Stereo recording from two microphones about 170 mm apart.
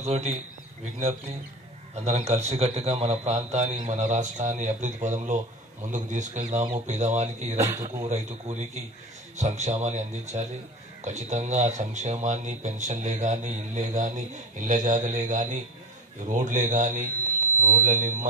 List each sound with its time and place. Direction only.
0.0 s a man's voice: 40° right (ahead or behind)
2.0 s a man's voice: 40° right (ahead or behind)
7.5 s speech: 20° right (ahead or behind)
8.1 s a man's voice: 40° right (ahead or behind)